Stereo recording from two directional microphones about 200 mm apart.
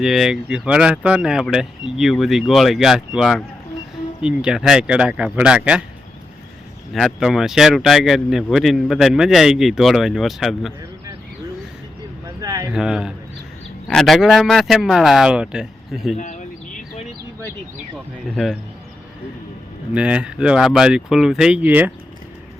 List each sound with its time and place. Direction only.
0.0 s speech: centre (ahead or behind)
6.9 s speech: centre (ahead or behind)
12.4 s a sound: 20° right (ahead or behind)
12.7 s speech: 5° right (ahead or behind)
16.1 s bird: 40° left (ahead or behind)
17.9 s speech: centre (ahead or behind)
19.9 s speech: 5° right (ahead or behind)